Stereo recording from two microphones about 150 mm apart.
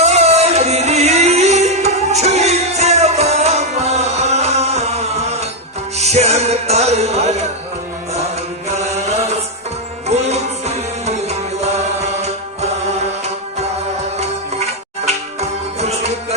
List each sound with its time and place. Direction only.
0.0 s music: 45° right (ahead or behind)
8.8 s mantra: 45° right (ahead or behind)
10.1 s music: 45° right (ahead or behind)
15.0 s music: 45° right (ahead or behind)